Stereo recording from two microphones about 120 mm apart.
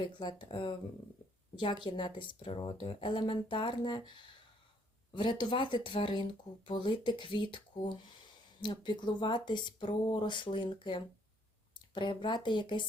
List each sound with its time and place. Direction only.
0.0 s speech: 40° left (ahead or behind)
5.1 s speech: 40° left (ahead or behind)
8.6 s speech: 40° left (ahead or behind)